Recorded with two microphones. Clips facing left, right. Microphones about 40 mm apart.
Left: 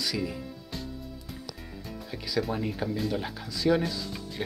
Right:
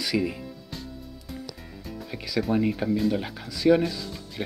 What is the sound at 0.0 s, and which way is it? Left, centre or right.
Speech, right.